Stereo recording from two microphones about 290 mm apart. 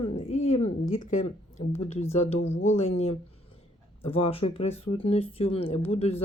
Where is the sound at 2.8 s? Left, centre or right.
Left.